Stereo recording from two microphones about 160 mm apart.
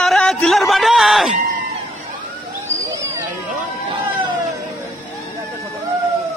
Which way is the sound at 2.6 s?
20° right (ahead or behind).